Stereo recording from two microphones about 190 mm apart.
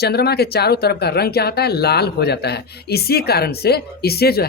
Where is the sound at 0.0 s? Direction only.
60° left (ahead or behind).